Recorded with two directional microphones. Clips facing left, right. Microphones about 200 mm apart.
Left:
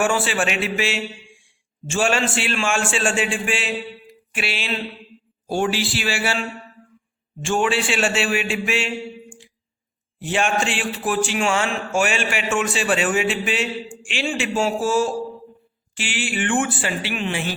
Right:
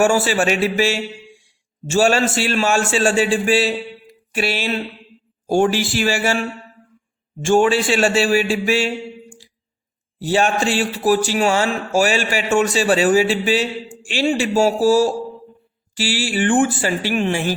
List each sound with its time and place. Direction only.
0.0 s a man's voice: 40° right (ahead or behind)
7.4 s a man's voice: 40° right (ahead or behind)
10.2 s a man's voice: 40° right (ahead or behind)